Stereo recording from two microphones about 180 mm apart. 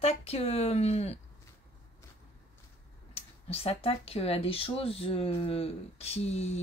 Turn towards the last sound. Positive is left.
turn(degrees=35)  # may be behind; listen again after turning